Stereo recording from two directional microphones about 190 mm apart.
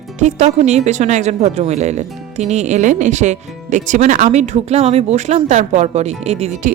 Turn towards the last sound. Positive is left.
turn(degrees=-35)  # may be behind; listen again after turning